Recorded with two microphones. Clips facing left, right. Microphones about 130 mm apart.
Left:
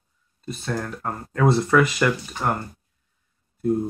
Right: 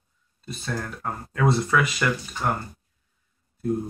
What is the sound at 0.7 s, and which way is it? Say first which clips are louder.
Speech: left 2 dB; centre (ahead or behind).